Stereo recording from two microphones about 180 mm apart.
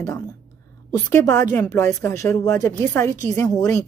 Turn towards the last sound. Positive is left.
turn(degrees=15)  # may be behind; listen again after turning